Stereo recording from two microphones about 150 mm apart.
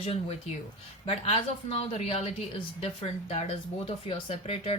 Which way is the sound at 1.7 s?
45° left (ahead or behind).